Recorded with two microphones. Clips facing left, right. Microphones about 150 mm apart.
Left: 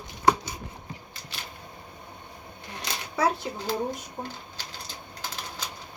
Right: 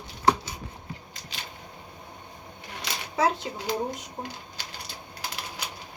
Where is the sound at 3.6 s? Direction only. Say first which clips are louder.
Even; 15° right (ahead or behind).